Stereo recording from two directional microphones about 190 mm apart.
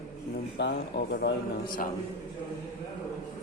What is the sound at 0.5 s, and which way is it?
Speech, 65° left (ahead or behind).